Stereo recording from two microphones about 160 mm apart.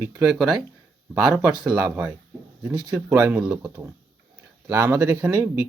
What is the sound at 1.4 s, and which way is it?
Speech, 15° right (ahead or behind).